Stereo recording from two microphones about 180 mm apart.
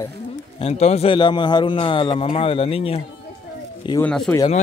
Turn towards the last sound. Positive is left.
turn(degrees=5)  # may be behind; listen again after turning